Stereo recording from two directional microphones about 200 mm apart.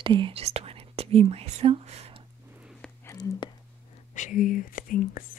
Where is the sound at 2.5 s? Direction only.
5° right (ahead or behind).